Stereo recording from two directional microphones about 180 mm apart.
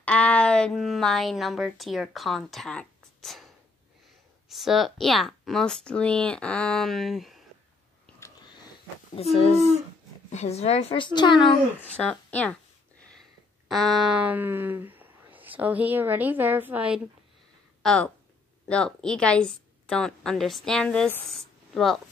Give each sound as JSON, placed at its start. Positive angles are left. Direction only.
{"t": 0.0, "sound": "speech", "side_deg": 5}
{"t": 4.5, "sound": "speech", "side_deg": 0}
{"t": 9.1, "sound": "a woman's voice", "side_deg": 35}
{"t": 12.0, "sound": "speech", "side_deg": 5}
{"t": 13.7, "sound": "speech", "side_deg": 0}
{"t": 17.8, "sound": "a woman's voice", "side_deg": 5}